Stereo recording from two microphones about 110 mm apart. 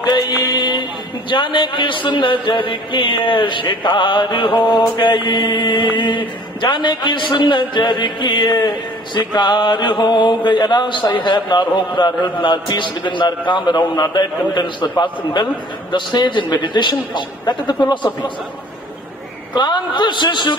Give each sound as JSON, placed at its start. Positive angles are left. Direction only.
{"t": 0.0, "sound": "music", "side_deg": 40}
{"t": 1.3, "sound": "a man's voice", "side_deg": 45}
{"t": 19.5, "sound": "a man's voice", "side_deg": 45}